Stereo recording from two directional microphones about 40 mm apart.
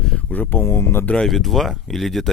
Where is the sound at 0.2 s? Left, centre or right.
Left.